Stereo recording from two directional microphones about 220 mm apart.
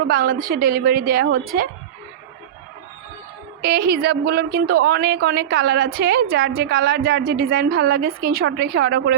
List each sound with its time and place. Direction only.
0.1 s a woman's voice: 40° right (ahead or behind)
3.6 s a woman's voice: 45° right (ahead or behind)